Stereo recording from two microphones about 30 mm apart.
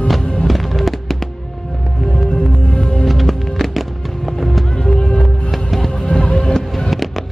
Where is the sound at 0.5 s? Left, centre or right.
Centre.